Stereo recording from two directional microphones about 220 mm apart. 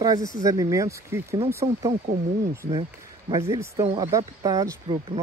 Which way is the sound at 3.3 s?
15° right (ahead or behind).